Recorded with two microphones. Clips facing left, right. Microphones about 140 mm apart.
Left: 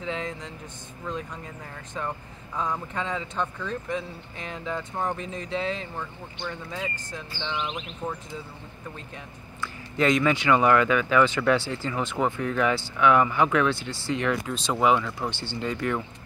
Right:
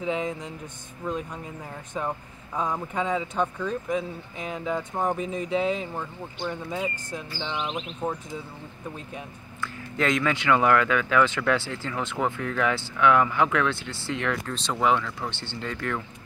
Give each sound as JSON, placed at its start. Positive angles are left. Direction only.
{"t": 0.0, "sound": "speech", "side_deg": -15}
{"t": 8.0, "sound": "speech", "side_deg": -25}
{"t": 9.6, "sound": "speech", "side_deg": 5}